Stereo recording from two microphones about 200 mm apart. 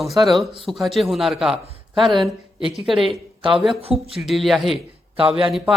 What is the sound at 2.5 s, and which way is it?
Speech, 25° left (ahead or behind).